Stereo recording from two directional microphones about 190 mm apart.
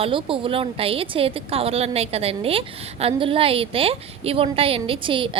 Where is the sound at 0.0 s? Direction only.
25° right (ahead or behind).